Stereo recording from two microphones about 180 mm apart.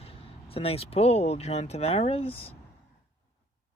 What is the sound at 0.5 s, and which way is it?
Speech, 35° left (ahead or behind).